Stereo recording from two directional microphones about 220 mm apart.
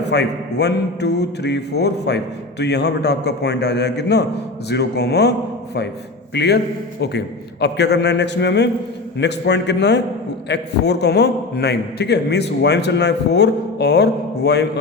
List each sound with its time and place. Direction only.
0.0 s a man's voice: 50° left (ahead or behind)
6.3 s a man's voice: 50° left (ahead or behind)
7.6 s a man's voice: 50° left (ahead or behind)